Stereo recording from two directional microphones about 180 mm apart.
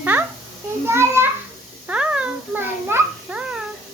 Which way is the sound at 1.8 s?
5° right (ahead or behind).